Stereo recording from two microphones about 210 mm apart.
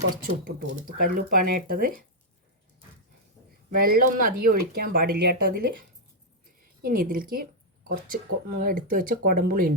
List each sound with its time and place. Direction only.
0.9 s speech: 40° right (ahead or behind)
3.8 s speech: 45° right (ahead or behind)
6.8 s speech: 45° right (ahead or behind)